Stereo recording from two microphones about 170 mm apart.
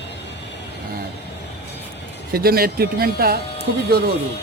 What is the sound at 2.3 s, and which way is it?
Speech, 60° right (ahead or behind).